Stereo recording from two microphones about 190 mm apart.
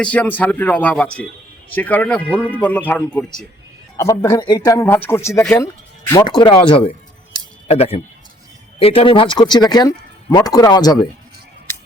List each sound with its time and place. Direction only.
0.0 s speech: 10° left (ahead or behind)
3.9 s a man's voice: 20° left (ahead or behind)